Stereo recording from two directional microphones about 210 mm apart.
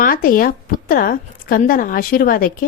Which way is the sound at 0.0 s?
40° left (ahead or behind).